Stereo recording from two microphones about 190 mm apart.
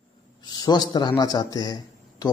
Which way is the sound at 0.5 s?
20° left (ahead or behind).